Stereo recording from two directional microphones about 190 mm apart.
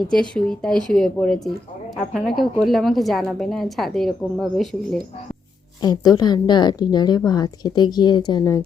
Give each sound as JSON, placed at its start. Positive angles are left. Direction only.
{"t": 0.1, "sound": "a woman's voice", "side_deg": 5}
{"t": 2.4, "sound": "a woman's voice", "side_deg": 0}
{"t": 5.8, "sound": "a woman's voice", "side_deg": 20}